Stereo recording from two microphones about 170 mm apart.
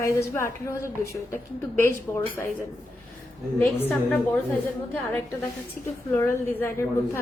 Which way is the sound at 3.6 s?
10° left (ahead or behind).